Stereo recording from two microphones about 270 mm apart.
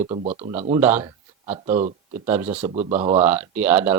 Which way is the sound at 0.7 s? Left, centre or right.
Centre.